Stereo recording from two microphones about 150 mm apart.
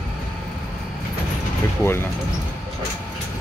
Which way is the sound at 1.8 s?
15° left (ahead or behind).